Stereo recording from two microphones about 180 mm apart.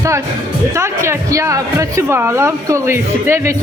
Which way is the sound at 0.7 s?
15° right (ahead or behind).